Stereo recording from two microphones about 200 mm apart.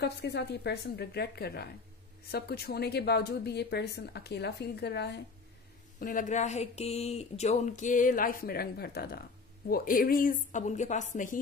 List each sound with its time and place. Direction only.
0.0 s a woman's voice: 55° left (ahead or behind)
5.9 s speech: 40° left (ahead or behind)